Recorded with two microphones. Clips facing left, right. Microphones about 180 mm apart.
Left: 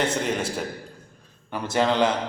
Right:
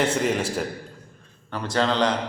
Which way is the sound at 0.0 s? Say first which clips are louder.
Right 2 dB; 5° right (ahead or behind).